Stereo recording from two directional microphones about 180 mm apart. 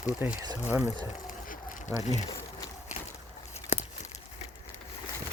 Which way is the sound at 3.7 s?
40° left (ahead or behind).